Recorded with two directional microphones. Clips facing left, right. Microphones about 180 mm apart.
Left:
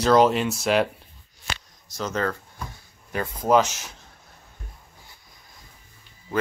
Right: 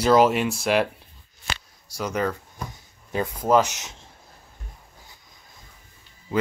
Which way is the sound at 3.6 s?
20° right (ahead or behind).